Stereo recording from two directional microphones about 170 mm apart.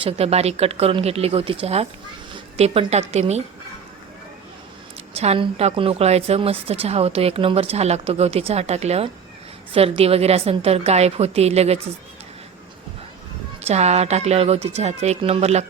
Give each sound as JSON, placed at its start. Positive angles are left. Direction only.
{"t": 0.0, "sound": "a woman's voice", "side_deg": -35}
{"t": 5.1, "sound": "a woman's voice", "side_deg": -35}
{"t": 13.6, "sound": "a woman's voice", "side_deg": -40}